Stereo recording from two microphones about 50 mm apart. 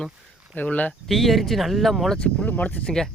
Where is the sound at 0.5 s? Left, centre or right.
Left.